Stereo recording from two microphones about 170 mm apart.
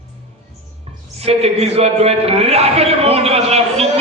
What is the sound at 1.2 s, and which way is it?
A man's voice, 35° right (ahead or behind).